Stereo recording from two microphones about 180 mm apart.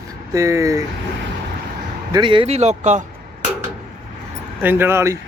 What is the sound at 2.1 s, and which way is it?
Speech, 25° right (ahead or behind).